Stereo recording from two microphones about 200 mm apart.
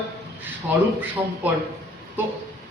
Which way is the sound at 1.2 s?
15° right (ahead or behind).